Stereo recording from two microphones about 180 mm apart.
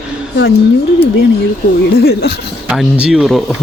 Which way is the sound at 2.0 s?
65° left (ahead or behind).